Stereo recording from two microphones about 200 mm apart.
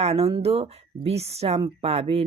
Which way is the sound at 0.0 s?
30° right (ahead or behind).